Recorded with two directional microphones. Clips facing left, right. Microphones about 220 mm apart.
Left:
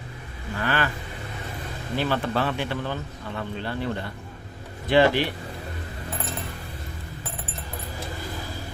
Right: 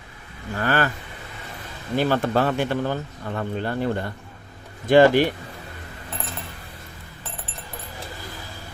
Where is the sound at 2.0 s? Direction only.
45° right (ahead or behind).